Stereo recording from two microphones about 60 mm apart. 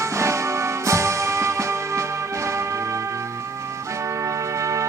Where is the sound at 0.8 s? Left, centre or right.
Right.